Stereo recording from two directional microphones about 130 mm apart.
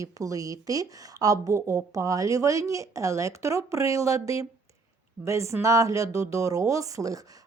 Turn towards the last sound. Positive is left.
turn(degrees=-25)  # may be behind; listen again after turning